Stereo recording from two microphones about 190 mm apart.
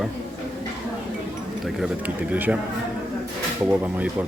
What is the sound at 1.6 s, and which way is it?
Speech, centre (ahead or behind).